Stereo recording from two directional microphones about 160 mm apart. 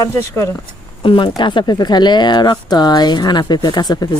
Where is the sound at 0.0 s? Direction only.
15° left (ahead or behind).